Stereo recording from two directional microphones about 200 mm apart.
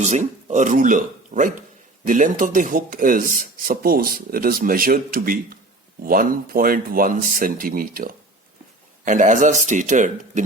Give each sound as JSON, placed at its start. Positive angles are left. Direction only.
{"t": 0.0, "sound": "speech", "side_deg": -35}